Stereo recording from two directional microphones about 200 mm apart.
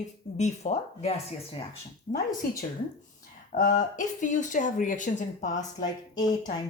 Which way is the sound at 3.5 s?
40° left (ahead or behind).